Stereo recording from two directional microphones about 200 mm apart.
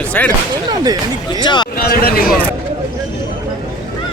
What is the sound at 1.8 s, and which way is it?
Speech, 50° left (ahead or behind).